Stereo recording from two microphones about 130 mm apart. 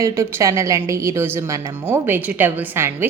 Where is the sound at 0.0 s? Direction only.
20° right (ahead or behind).